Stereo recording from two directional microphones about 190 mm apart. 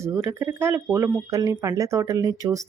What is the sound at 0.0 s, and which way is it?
Speech, 15° right (ahead or behind).